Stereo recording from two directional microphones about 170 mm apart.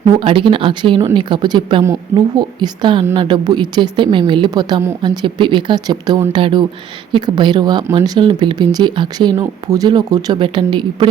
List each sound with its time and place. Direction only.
0.0 s speech: 30° right (ahead or behind)